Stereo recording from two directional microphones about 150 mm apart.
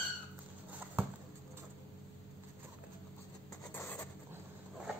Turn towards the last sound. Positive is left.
turn(degrees=15)  # may be behind; listen again after turning